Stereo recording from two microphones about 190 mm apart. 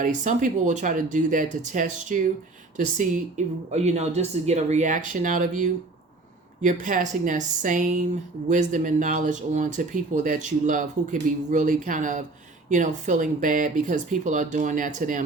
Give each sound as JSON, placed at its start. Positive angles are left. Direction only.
{"t": 0.0, "sound": "speech", "side_deg": -45}